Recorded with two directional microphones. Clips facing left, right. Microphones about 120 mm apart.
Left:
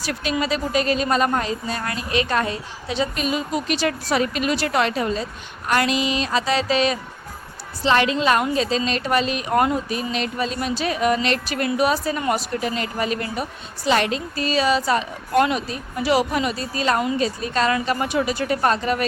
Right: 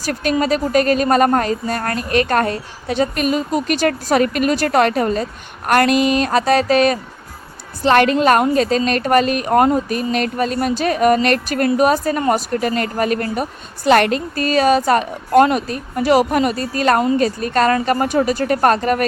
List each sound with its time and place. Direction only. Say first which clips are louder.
0.0 s a woman's voice: right 6 dB; 50° right (ahead or behind)